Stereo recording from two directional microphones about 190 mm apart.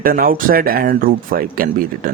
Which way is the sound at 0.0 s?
50° right (ahead or behind).